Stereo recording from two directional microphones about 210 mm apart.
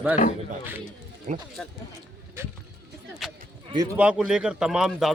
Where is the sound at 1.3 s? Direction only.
35° right (ahead or behind).